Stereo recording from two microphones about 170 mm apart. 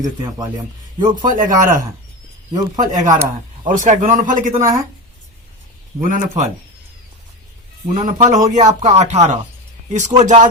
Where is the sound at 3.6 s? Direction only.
50° right (ahead or behind).